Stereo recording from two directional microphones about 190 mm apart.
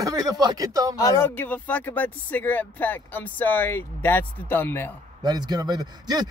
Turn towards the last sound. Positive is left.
turn(degrees=-20)  # may be behind; listen again after turning